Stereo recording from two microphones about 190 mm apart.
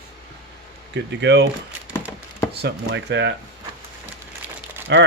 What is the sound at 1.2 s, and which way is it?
Speech, 65° right (ahead or behind).